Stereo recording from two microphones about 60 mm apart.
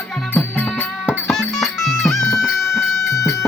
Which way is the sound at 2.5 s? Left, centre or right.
Left.